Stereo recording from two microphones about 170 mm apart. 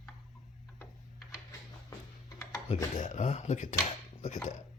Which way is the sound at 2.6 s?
40° left (ahead or behind).